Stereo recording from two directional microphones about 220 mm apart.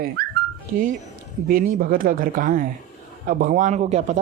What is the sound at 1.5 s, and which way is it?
Speech, 40° right (ahead or behind).